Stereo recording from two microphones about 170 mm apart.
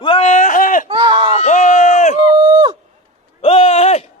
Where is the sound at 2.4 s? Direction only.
25° right (ahead or behind).